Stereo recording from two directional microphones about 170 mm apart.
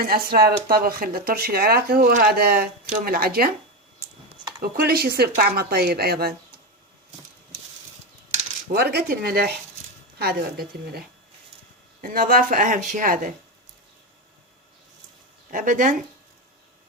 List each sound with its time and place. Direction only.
0.0 s speech: 60° right (ahead or behind)
2.8 s speech: 50° right (ahead or behind)
4.9 s speech: 65° right (ahead or behind)
8.7 s speech: 70° right (ahead or behind)
12.0 s speech: 55° right (ahead or behind)
15.4 s speech: 50° right (ahead or behind)